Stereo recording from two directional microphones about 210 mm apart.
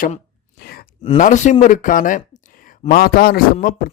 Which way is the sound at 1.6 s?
40° left (ahead or behind).